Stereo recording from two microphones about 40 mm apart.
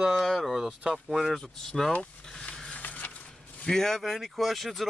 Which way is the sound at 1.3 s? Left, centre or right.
Centre.